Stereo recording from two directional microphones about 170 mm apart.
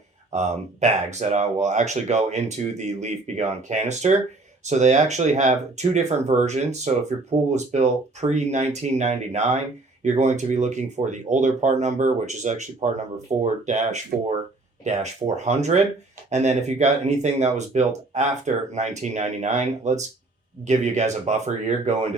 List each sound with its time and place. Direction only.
0.3 s speech: 40° right (ahead or behind)
15.4 s speech: 40° right (ahead or behind)